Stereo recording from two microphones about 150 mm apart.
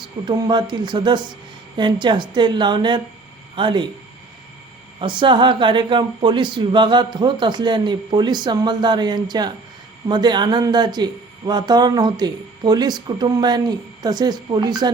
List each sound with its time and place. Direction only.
0.3 s speech: 30° right (ahead or behind)
4.9 s speech: 30° right (ahead or behind)